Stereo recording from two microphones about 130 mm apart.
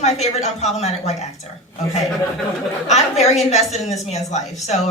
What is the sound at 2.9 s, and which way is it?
Speech, 55° left (ahead or behind).